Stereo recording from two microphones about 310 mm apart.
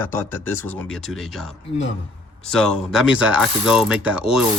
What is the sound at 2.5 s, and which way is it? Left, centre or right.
Mechanisms, centre.